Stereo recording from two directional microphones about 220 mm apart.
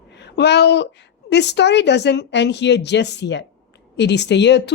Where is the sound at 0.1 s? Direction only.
50° left (ahead or behind).